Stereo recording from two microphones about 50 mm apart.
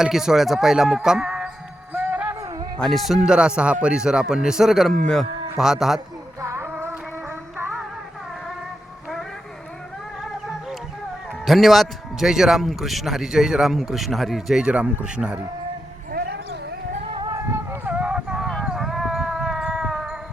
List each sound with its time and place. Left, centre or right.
0.0 s a man's voice: centre
1.9 s a sound: right
2.8 s a man's voice: centre
3.2 s a man's voice: centre
4.9 s moo: centre
5.5 s a man's voice: centre
6.4 s music: right
10.4 s music: centre
11.4 s a man's voice: centre
14.6 s speech: right
17.3 s a sound: right
17.8 s music: right
18.3 s a sound: centre
19.4 s cat: centre